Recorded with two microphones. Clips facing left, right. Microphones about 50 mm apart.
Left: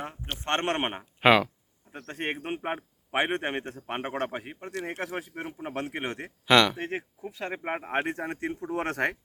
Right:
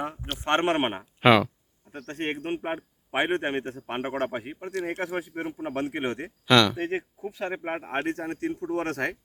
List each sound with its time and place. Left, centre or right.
0.3 s a man's voice: centre
0.6 s a man's voice: centre
1.2 s speech: centre
3.2 s a man's voice: centre
6.4 s speech: centre
6.7 s a man's voice: centre
7.6 s speech: centre